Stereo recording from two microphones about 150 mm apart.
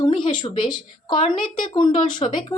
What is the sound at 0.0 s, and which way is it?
A woman's voice, 30° left (ahead or behind).